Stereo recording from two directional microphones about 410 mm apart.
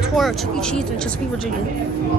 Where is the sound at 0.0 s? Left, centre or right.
Centre.